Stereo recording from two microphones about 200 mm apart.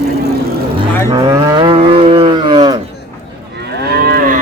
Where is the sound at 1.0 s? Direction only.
20° right (ahead or behind).